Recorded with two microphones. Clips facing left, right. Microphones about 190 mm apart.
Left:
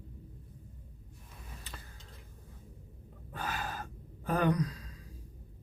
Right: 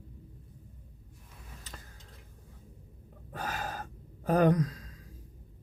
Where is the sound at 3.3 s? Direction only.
40° right (ahead or behind).